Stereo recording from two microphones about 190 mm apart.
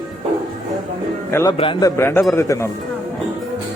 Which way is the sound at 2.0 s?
15° left (ahead or behind).